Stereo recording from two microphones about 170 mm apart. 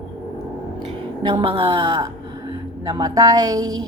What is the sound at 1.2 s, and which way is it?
Speech, 25° right (ahead or behind).